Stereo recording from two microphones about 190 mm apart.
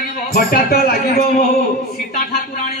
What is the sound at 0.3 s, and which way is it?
A man's voice, 55° left (ahead or behind).